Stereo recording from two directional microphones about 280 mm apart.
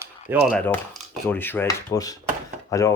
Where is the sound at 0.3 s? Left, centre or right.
Centre.